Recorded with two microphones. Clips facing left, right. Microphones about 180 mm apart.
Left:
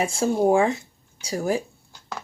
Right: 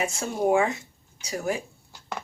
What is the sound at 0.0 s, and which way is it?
Speech, 30° left (ahead or behind).